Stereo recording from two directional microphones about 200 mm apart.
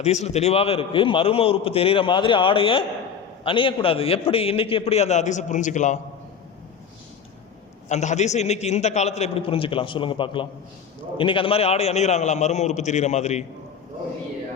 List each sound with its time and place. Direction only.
0.0 s a man's voice: 35° left (ahead or behind)
7.9 s a man's voice: 35° left (ahead or behind)